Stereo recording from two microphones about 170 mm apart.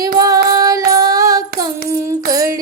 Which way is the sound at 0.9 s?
20° right (ahead or behind).